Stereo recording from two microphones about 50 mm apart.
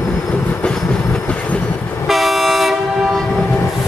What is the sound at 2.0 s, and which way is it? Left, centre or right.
Train, centre.